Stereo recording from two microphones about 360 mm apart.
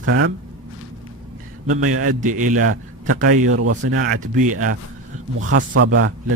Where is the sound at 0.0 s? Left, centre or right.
Right.